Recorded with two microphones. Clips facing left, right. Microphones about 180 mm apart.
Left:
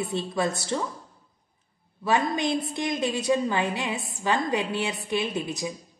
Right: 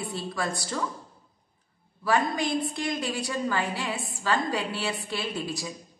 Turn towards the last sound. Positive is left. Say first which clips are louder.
# left 3 dB
turn(degrees=20)  # may be behind; listen again after turning